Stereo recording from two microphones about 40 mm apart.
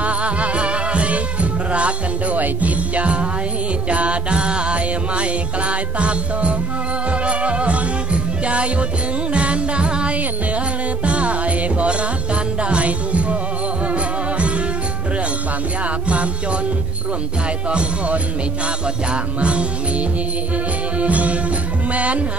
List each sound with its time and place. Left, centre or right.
0.0 s music: right
2.3 s music: right
17.6 s speech: right
19.4 s music: right